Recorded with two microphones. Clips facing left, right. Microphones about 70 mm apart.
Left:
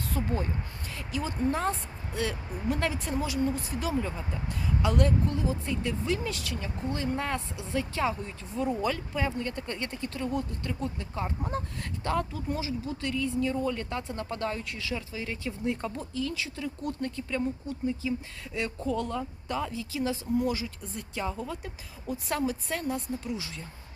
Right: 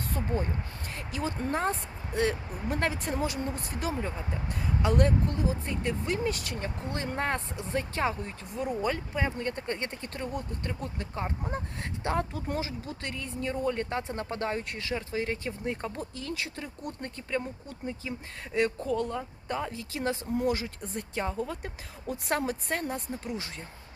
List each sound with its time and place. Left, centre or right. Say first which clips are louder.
0.1 s speech: even; right
12.3 s speech: left 1 dB; right
16.1 s speech: left 3 dB; right
19.7 s speech: left 1 dB; right
21.6 s speech: right 2 dB; right